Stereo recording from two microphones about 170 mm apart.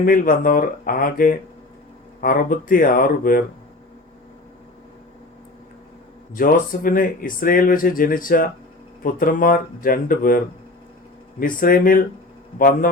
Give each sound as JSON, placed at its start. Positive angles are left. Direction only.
{"t": 0.0, "sound": "speech", "side_deg": 55}
{"t": 6.3, "sound": "speech", "side_deg": 55}